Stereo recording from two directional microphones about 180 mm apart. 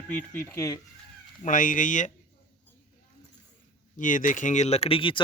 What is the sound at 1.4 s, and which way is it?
Speech, 50° left (ahead or behind).